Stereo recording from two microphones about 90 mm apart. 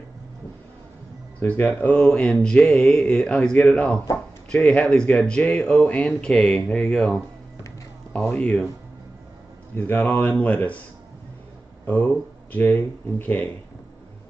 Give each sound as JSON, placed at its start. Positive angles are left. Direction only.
{"t": 1.4, "sound": "speech", "side_deg": 25}
{"t": 1.7, "sound": "speech", "side_deg": 15}
{"t": 8.4, "sound": "speech", "side_deg": 10}
{"t": 9.8, "sound": "speech", "side_deg": 20}
{"t": 11.8, "sound": "speech", "side_deg": 20}